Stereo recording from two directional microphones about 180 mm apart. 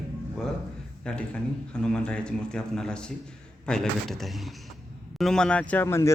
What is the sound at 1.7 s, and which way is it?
A man's voice, 5° left (ahead or behind).